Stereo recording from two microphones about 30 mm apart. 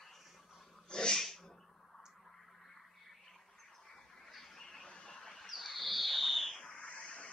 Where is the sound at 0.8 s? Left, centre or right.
Left.